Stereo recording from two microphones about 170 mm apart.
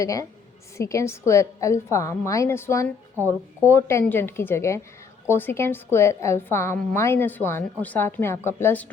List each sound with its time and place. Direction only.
0.0 s a woman's voice: 20° left (ahead or behind)